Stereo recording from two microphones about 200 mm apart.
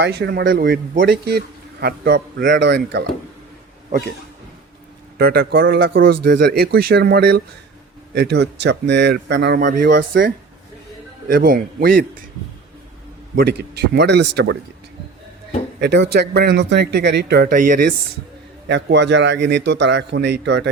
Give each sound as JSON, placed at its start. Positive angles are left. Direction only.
{"t": 0.0, "sound": "a man's voice", "side_deg": -55}
{"t": 5.1, "sound": "a man's voice", "side_deg": -50}
{"t": 9.7, "sound": "a man's voice", "side_deg": -45}
{"t": 11.3, "sound": "a man's voice", "side_deg": -45}
{"t": 13.3, "sound": "speech", "side_deg": -55}
{"t": 15.8, "sound": "speech", "side_deg": -55}
{"t": 18.7, "sound": "speech", "side_deg": -60}